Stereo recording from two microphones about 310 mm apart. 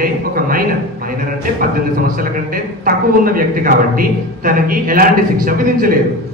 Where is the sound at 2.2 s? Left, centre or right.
Right.